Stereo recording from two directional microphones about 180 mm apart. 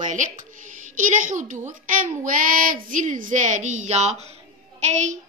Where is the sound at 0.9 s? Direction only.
45° right (ahead or behind).